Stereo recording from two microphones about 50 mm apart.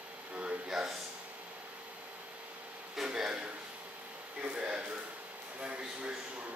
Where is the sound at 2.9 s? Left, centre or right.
Centre.